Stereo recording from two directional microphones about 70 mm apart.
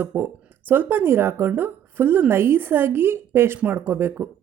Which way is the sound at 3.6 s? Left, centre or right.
Right.